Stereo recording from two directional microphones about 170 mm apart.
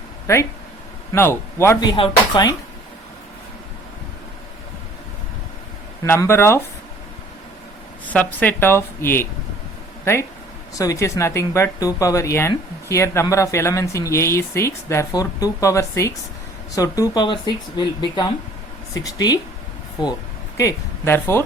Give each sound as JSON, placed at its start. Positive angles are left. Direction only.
{"t": 1.1, "sound": "speech", "side_deg": 15}
{"t": 1.9, "sound": "speech", "side_deg": 25}
{"t": 6.1, "sound": "speech", "side_deg": 15}
{"t": 8.0, "sound": "speech", "side_deg": 10}
{"t": 20.6, "sound": "speech", "side_deg": 15}